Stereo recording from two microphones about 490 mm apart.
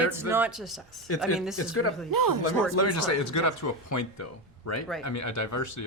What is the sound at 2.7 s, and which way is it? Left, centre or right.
Speech, left.